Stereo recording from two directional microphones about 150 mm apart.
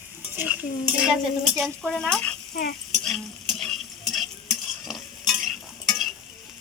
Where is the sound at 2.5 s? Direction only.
90° left.